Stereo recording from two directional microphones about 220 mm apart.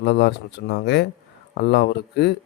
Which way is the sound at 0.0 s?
50° left (ahead or behind).